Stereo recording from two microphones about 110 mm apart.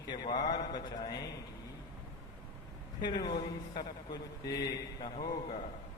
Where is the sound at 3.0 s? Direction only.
45° left (ahead or behind).